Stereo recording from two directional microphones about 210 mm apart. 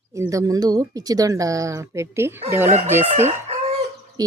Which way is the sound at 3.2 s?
30° right (ahead or behind).